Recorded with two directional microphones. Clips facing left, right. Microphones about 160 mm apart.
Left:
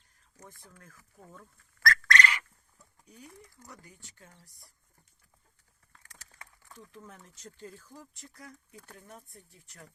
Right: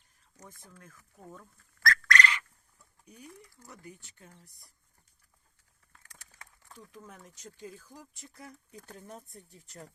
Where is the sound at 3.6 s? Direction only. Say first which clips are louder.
Right 3 dB; 20° right (ahead or behind).